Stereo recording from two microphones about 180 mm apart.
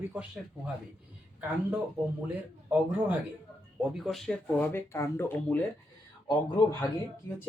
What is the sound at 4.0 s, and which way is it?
Speech, centre (ahead or behind).